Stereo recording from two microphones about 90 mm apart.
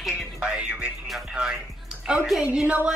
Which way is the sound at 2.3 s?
10° right (ahead or behind).